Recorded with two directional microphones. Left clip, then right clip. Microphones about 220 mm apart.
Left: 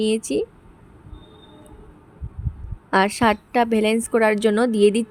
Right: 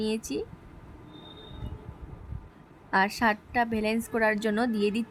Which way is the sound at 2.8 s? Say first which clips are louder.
Left 7 dB; 25° left (ahead or behind).